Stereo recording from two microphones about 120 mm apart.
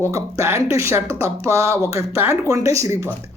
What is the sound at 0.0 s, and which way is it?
A man's voice, 25° right (ahead or behind).